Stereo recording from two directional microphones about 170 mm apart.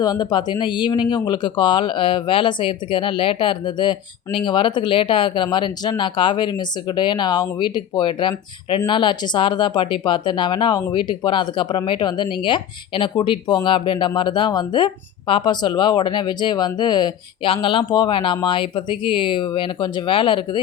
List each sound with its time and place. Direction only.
0.0 s speech: 25° left (ahead or behind)